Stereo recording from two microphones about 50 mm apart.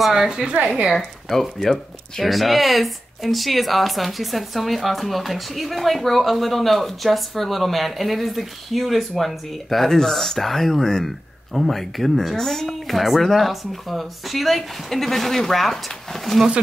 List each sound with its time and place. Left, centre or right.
0.0 s a woman's voice: centre
0.9 s speech: centre